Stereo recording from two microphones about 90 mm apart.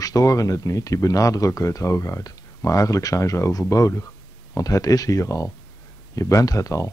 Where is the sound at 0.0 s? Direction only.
40° left (ahead or behind).